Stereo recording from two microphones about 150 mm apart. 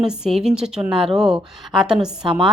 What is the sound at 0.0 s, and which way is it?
A woman's voice, 5° right (ahead or behind).